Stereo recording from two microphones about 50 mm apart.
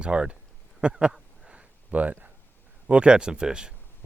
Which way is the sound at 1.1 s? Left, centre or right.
Centre.